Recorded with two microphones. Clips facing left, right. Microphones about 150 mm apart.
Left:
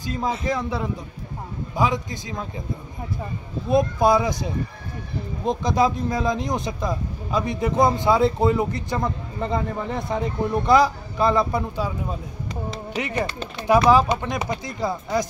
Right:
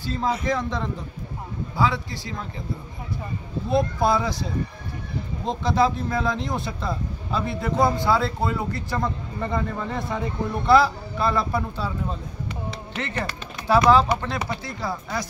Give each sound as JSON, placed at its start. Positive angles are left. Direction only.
{"t": 0.0, "sound": "speech", "side_deg": 15}
{"t": 3.7, "sound": "speech", "side_deg": 15}